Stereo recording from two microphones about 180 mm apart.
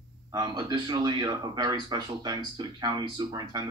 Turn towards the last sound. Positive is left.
turn(degrees=-25)  # may be behind; listen again after turning